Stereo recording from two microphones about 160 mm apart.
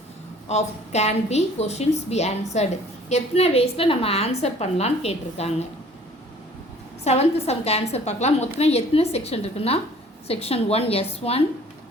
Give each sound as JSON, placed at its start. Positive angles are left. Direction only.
{"t": 0.4, "sound": "a woman's voice", "side_deg": 45}
{"t": 7.0, "sound": "a woman's voice", "side_deg": 40}